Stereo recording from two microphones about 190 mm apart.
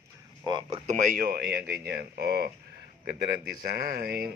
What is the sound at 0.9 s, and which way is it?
Speech, 45° right (ahead or behind).